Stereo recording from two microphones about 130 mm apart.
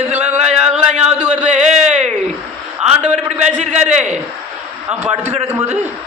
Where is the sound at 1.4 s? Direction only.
65° right (ahead or behind).